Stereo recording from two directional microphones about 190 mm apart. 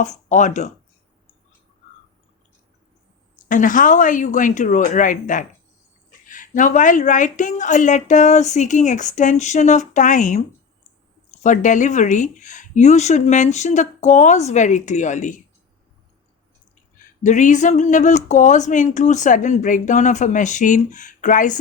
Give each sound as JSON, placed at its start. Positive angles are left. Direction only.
{"t": 0.0, "sound": "speech", "side_deg": 40}
{"t": 3.5, "sound": "speech", "side_deg": 45}
{"t": 11.4, "sound": "speech", "side_deg": 40}
{"t": 17.2, "sound": "speech", "side_deg": 40}